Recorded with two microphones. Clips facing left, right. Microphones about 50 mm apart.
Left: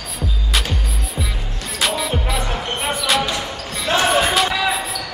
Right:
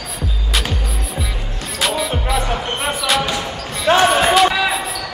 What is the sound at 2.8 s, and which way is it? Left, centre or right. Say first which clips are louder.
Basketball bounce: left 1 dB; centre.